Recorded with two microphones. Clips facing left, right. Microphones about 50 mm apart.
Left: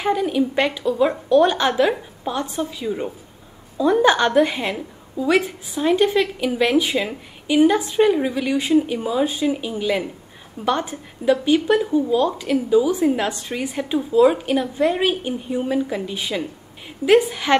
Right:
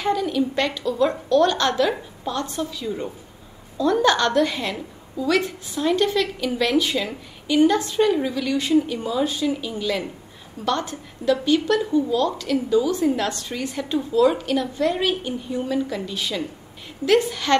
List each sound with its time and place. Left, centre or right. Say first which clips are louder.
0.0 s a woman's voice: left 2 dB; centre